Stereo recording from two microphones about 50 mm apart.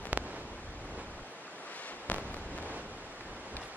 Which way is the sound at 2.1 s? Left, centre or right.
Left.